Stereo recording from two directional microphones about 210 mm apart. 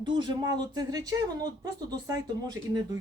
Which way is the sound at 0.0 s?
20° right (ahead or behind).